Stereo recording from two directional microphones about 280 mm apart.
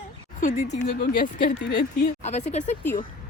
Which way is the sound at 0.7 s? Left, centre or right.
Left.